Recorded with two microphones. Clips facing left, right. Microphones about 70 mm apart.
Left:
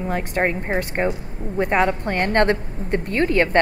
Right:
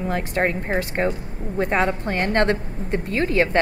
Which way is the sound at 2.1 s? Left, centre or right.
Left.